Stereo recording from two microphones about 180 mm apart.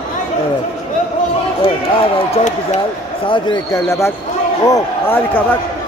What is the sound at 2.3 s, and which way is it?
Speech, 40° left (ahead or behind).